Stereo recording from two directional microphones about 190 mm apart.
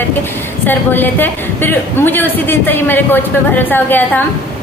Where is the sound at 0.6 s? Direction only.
10° left (ahead or behind).